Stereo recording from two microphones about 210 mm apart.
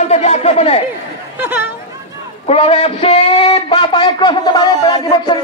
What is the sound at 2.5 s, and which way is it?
A man's voice, 25° left (ahead or behind).